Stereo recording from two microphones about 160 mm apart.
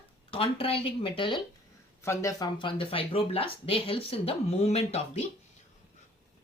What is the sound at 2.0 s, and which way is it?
Speech, 20° left (ahead or behind).